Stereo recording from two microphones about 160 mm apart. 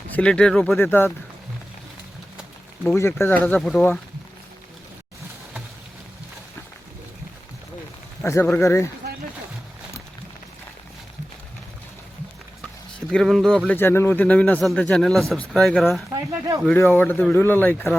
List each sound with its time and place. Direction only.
0.1 s speech: 5° left (ahead or behind)
0.8 s a man's voice: 15° left (ahead or behind)
2.8 s a man's voice: 15° left (ahead or behind)
8.2 s a man's voice: 15° left (ahead or behind)
13.1 s speech: centre (ahead or behind)
13.7 s a man's voice: 15° left (ahead or behind)
16.7 s a man's voice: 15° left (ahead or behind)